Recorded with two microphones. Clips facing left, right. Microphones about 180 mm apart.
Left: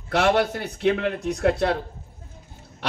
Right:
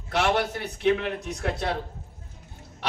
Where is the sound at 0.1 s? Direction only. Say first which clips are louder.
Left 4 dB; 55° left (ahead or behind).